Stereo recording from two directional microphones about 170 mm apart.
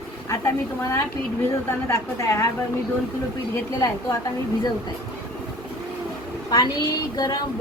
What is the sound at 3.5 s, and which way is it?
Speech, 20° left (ahead or behind).